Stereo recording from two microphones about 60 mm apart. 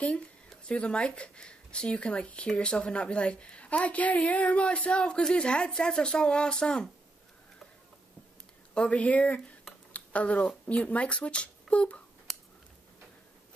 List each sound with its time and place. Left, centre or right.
0.7 s speech: centre
8.7 s speech: left